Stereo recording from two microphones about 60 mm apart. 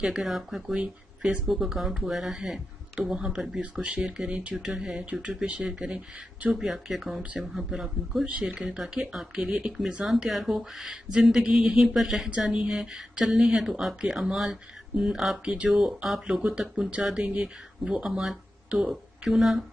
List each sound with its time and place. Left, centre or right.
0.0 s a man's voice: centre
8.3 s a man's voice: centre
12.3 s speech: centre
15.4 s speech: centre
15.7 s a man's voice: centre